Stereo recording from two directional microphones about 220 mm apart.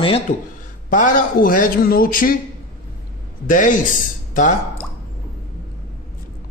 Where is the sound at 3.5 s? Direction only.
35° left (ahead or behind).